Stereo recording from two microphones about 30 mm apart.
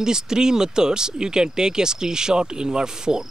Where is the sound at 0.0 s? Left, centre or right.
Right.